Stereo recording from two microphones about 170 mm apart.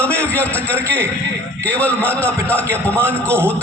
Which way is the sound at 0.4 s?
10° left (ahead or behind).